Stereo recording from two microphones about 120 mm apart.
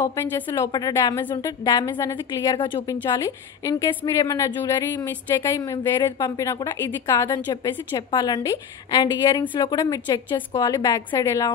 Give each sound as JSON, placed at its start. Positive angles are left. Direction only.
{"t": 0.0, "sound": "a woman's voice", "side_deg": 20}
{"t": 2.9, "sound": "a woman's voice", "side_deg": 30}
{"t": 7.2, "sound": "a woman's voice", "side_deg": 35}